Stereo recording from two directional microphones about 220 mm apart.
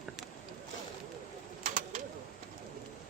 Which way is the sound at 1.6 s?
35° right (ahead or behind).